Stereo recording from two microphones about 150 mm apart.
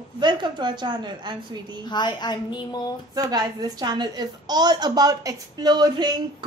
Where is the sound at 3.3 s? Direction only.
25° right (ahead or behind).